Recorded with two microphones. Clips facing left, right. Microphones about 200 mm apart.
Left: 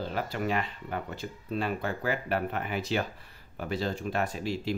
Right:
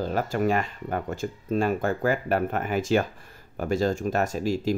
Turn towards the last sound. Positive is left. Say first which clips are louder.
# right 6 dB
turn(degrees=-45)  # may be behind; listen again after turning